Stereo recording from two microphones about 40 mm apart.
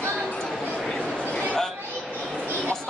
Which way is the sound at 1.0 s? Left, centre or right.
Left.